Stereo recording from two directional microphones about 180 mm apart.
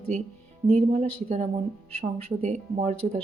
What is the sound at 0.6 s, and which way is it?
Speech, 40° right (ahead or behind).